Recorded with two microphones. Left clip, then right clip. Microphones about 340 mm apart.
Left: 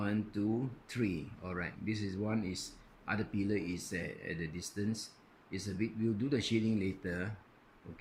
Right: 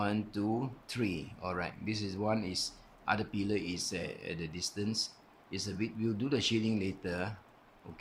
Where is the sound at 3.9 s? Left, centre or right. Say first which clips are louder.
Right 1 dB; right.